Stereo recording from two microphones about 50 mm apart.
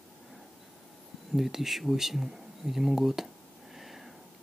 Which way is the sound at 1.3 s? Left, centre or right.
Centre.